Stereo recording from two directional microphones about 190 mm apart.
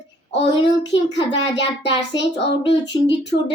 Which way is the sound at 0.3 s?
25° left (ahead or behind).